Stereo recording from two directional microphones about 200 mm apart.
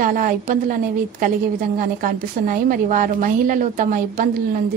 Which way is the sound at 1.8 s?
45° right (ahead or behind).